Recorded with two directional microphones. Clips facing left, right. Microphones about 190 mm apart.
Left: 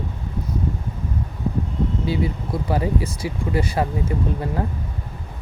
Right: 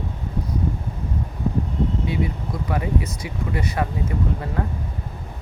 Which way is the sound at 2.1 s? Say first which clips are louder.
Left 2 dB; 30° left (ahead or behind).